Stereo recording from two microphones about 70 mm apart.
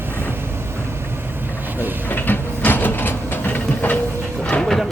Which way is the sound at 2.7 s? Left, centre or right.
Left.